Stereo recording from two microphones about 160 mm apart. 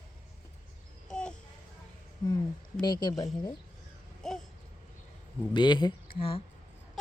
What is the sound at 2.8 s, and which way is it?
Speech, 25° left (ahead or behind).